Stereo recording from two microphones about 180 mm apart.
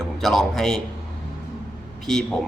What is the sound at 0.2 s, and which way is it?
Speech, centre (ahead or behind).